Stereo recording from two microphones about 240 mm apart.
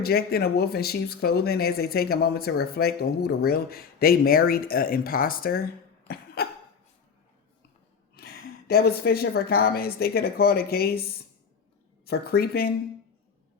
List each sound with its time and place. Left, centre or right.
0.0 s speech: left
6.1 s cough: left
8.1 s a woman's voice: left
12.0 s speech: left